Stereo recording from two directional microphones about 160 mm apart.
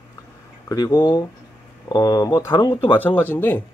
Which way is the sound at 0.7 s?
25° left (ahead or behind).